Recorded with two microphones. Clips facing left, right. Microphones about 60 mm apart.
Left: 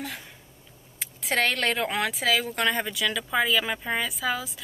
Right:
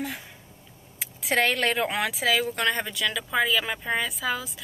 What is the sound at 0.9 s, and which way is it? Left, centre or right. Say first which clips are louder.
Speech: right 2 dB; centre.